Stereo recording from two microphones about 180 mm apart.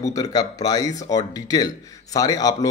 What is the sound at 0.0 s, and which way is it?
A man's voice, 20° left (ahead or behind).